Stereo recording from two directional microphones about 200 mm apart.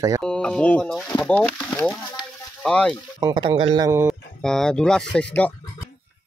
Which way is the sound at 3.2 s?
20° right (ahead or behind).